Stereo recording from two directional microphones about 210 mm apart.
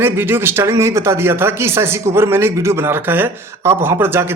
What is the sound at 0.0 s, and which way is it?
Speech, 10° right (ahead or behind).